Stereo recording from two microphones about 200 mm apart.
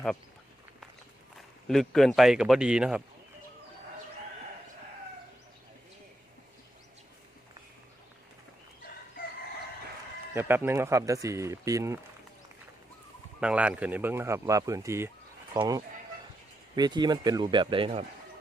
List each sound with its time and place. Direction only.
1.6 s speech: centre (ahead or behind)
10.3 s speech: 10° right (ahead or behind)
13.4 s speech: 5° right (ahead or behind); by 18.0 s 25° right (ahead or behind)